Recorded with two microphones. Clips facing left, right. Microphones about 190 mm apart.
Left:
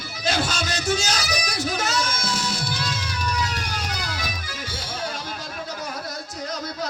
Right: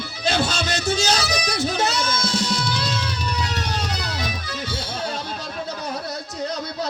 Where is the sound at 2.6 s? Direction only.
65° right (ahead or behind).